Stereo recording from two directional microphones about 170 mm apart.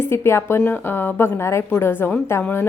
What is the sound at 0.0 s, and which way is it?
A woman's voice, 15° left (ahead or behind).